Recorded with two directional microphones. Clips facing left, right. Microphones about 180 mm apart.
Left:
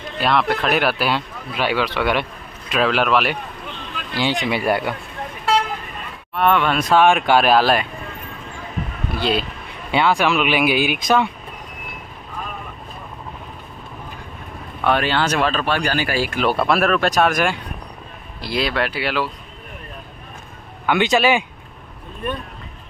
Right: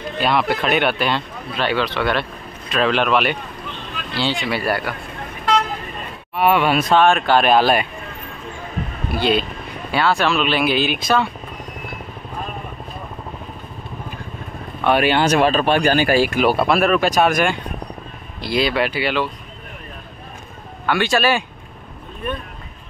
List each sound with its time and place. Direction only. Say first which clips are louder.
0.2 s speech: even; centre (ahead or behind)
4.2 s speech: left 1 dB; 15° left (ahead or behind)
6.3 s speech: right 1 dB; 10° right (ahead or behind)
6.9 s speech: left 2 dB; 10° left (ahead or behind)
7.4 s speech: right 1 dB; centre (ahead or behind)
9.2 s speech: right 3 dB; centre (ahead or behind)
9.8 s speech: left 1 dB; 20° left (ahead or behind)
15.0 s speech: right 4 dB; 15° right (ahead or behind)
16.2 s speech: right 3 dB; 5° right (ahead or behind)
20.8 s speech: left 1 dB; 20° left (ahead or behind)